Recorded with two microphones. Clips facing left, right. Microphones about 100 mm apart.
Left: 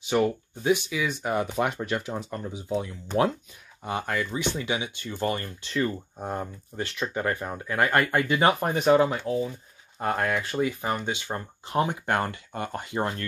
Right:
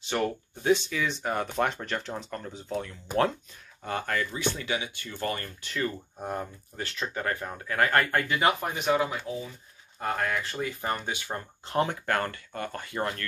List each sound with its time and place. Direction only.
0.0 s speech: 10° left (ahead or behind)
8.6 s speech: 35° left (ahead or behind)
9.9 s speech: 20° left (ahead or behind)